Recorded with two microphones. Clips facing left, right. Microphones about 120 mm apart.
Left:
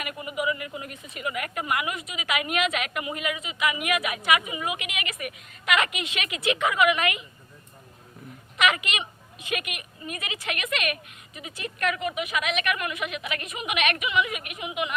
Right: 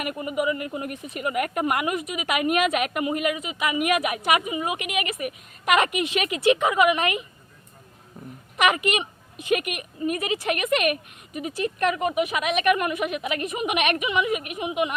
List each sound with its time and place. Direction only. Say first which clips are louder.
0.0 s a woman's voice: right 4 dB; 45° right (ahead or behind)
8.6 s a woman's voice: right 4 dB; 40° right (ahead or behind)